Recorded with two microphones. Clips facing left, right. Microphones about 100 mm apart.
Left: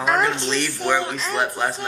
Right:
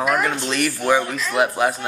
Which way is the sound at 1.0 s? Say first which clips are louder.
Right 1 dB; 30° left (ahead or behind).